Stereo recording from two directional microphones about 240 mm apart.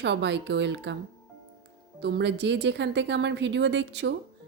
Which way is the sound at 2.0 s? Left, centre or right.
Right.